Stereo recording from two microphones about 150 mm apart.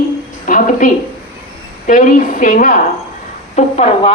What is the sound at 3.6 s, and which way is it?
Speech, 45° left (ahead or behind).